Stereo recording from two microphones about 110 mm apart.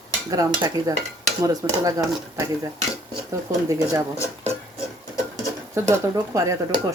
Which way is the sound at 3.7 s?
30° right (ahead or behind).